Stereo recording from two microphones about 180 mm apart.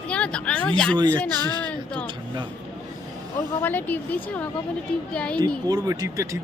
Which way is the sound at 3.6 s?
10° left (ahead or behind).